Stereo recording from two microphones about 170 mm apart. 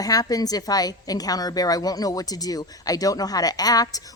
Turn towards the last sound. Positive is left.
turn(degrees=20)  # may be behind; listen again after turning